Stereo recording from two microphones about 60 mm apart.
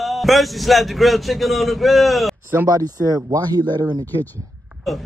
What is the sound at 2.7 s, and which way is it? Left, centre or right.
Speech, right.